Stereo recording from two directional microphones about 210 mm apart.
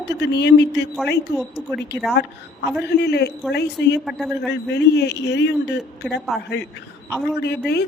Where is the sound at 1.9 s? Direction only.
55° left (ahead or behind).